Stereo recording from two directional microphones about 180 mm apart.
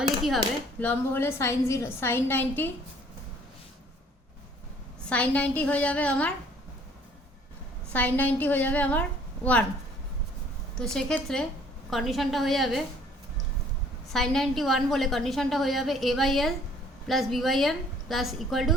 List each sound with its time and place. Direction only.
0.8 s a woman's voice: 10° left (ahead or behind)
5.0 s a woman's voice: 5° left (ahead or behind)
7.9 s a woman's voice: 10° left (ahead or behind)
10.9 s a woman's voice: 5° left (ahead or behind)
14.1 s a woman's voice: centre (ahead or behind)